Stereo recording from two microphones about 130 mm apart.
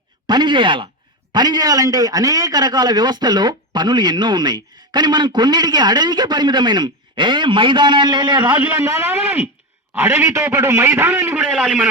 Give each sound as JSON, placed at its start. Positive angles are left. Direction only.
{"t": 0.3, "sound": "a man's voice", "side_deg": -35}
{"t": 8.5, "sound": "a man's voice", "side_deg": -10}